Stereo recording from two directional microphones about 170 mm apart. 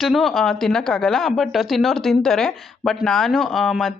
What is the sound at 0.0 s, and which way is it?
Speech, centre (ahead or behind).